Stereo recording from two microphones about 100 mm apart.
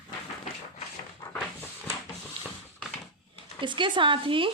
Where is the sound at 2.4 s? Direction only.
65° right (ahead or behind).